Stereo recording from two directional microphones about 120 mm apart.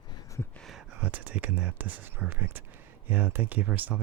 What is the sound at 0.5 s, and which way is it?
Speech, centre (ahead or behind).